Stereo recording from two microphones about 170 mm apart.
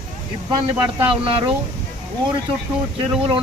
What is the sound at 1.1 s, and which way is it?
Speech, 30° right (ahead or behind).